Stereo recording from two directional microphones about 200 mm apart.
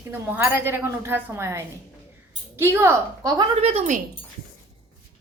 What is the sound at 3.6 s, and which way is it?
Speech, 30° right (ahead or behind).